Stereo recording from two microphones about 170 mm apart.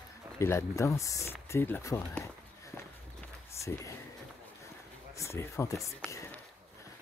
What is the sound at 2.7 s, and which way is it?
Walk, 15° left (ahead or behind).